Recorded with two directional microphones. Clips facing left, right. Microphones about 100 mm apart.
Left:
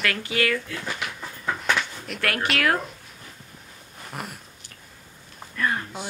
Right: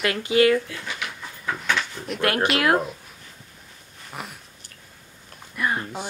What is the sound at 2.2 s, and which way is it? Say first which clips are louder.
Speech: right 5 dB; 20° right (ahead or behind).